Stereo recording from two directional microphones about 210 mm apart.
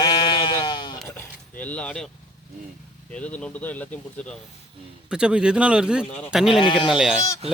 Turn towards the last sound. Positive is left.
turn(degrees=-30)  # may be behind; listen again after turning